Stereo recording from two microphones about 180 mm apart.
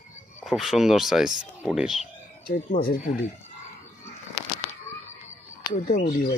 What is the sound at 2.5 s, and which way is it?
Speech, 50° left (ahead or behind).